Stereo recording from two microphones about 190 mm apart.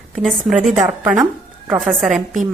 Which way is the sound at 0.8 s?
15° right (ahead or behind).